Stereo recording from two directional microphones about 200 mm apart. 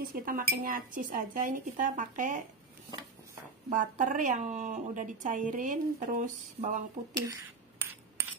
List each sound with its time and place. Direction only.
0.0 s speech: 45° right (ahead or behind)
3.7 s speech: 40° right (ahead or behind)
7.8 s a sound: 10° right (ahead or behind)